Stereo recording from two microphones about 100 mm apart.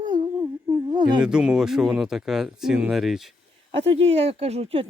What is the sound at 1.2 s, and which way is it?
Speech, 10° right (ahead or behind).